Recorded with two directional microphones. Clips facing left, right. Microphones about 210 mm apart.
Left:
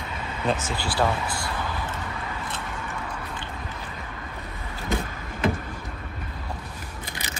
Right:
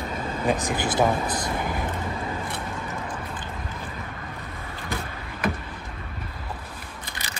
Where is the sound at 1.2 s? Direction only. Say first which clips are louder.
Right 3 dB; 20° right (ahead or behind).